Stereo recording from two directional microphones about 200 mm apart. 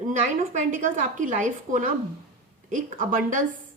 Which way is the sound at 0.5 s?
40° right (ahead or behind).